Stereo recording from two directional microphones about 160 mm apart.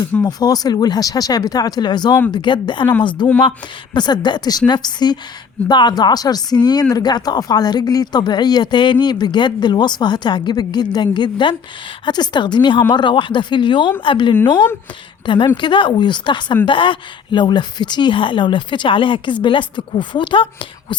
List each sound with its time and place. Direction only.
0.3 s a woman's voice: 25° left (ahead or behind)